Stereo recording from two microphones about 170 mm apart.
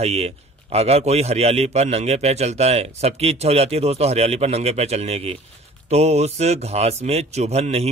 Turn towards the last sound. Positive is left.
turn(degrees=-40)  # may be behind; listen again after turning